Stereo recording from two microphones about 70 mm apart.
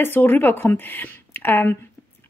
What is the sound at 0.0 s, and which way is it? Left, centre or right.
A woman's voice, left.